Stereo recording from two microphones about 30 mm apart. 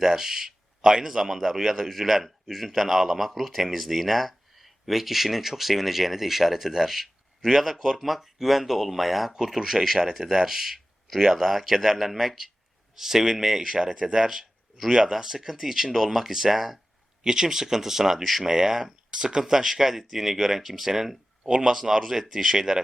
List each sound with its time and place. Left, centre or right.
0.0 s speech: centre
0.8 s speech: right; by 9.3 s centre
9.3 s speech: centre
17.2 s speech: right
18.2 s speech: centre
18.4 s speech: centre